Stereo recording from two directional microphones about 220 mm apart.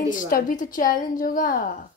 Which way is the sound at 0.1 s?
40° left (ahead or behind).